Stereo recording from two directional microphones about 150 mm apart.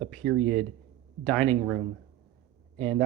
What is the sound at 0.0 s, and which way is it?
Speech, 5° left (ahead or behind).